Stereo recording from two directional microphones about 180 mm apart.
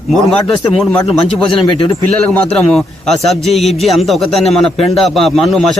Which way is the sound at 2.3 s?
5° left (ahead or behind).